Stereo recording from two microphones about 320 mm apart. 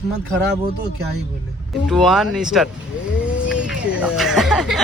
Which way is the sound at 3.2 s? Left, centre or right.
Centre.